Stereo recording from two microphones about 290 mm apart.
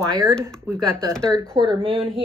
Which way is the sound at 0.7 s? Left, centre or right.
Centre.